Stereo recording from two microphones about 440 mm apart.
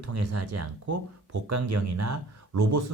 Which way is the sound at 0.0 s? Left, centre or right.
Right.